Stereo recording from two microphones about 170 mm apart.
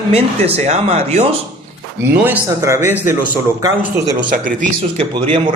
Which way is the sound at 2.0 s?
10° right (ahead or behind).